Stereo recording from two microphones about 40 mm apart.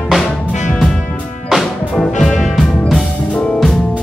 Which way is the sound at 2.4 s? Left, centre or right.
Centre.